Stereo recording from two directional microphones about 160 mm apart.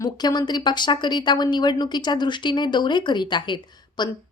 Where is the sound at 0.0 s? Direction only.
25° left (ahead or behind).